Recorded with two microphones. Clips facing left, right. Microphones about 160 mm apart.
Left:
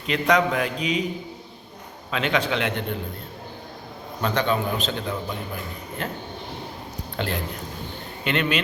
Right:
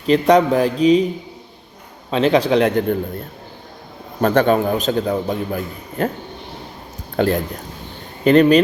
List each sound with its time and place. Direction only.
0.1 s a man's voice: 35° right (ahead or behind)
2.0 s a man's voice: 35° right (ahead or behind)
4.2 s a man's voice: 50° right (ahead or behind)
7.2 s a man's voice: 45° right (ahead or behind)